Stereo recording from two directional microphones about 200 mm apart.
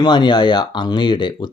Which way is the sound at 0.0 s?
20° left (ahead or behind).